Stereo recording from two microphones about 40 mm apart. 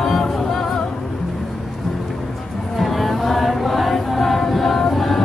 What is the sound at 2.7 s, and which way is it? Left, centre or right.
Music, centre.